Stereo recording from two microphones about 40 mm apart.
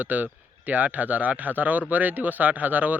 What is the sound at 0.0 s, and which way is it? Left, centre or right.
Speech, right.